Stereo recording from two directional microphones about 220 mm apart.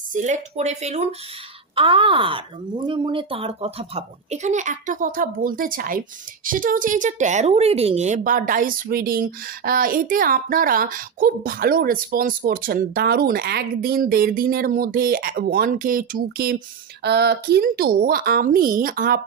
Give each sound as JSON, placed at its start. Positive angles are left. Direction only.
{"t": 0.1, "sound": "speech", "side_deg": -35}